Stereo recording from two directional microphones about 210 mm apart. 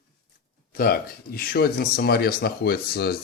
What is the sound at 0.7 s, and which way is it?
Speech, 45° left (ahead or behind).